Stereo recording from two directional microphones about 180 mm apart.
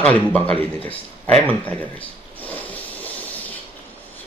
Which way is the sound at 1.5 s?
10° left (ahead or behind).